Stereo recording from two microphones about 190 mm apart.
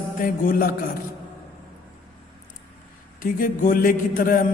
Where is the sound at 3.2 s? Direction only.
45° left (ahead or behind).